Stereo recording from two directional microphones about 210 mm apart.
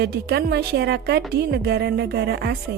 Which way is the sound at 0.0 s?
50° right (ahead or behind).